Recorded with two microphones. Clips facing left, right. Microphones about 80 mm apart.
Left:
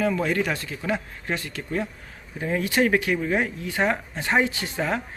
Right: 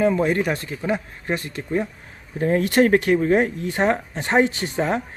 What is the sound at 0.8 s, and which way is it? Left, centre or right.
Speech, centre.